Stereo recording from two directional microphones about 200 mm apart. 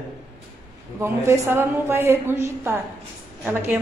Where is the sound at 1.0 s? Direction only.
15° right (ahead or behind).